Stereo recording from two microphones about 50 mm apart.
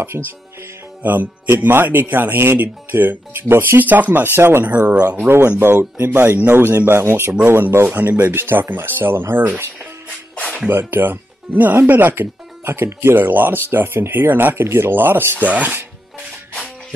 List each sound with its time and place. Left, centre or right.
1.0 s speech: right
10.3 s music: left
10.7 s speech: right
12.6 s speech: right
15.3 s speech: right